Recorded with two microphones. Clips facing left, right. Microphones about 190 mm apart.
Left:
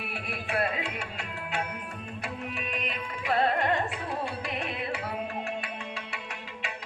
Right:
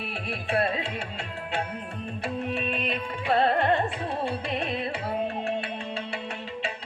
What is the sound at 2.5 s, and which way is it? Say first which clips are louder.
Music: right 6 dB; 30° right (ahead or behind).